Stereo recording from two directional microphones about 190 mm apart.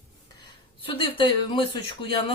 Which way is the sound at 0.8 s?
25° left (ahead or behind).